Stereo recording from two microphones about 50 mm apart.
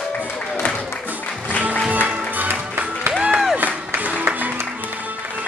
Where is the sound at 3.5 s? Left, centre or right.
Right.